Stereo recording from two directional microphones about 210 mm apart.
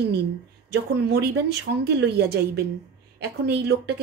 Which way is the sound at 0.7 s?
50° right (ahead or behind).